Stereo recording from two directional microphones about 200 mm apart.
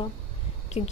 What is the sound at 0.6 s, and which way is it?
Speech, 35° left (ahead or behind).